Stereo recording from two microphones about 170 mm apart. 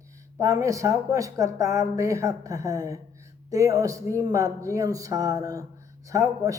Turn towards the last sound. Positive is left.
turn(degrees=-20)  # may be behind; listen again after turning